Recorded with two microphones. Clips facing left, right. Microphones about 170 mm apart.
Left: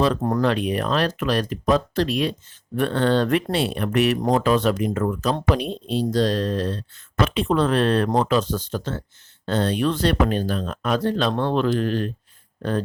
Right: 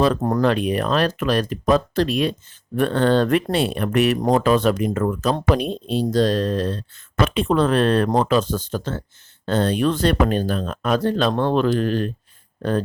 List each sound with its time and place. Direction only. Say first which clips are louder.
0.0 s speech: right 2 dB; 45° right (ahead or behind)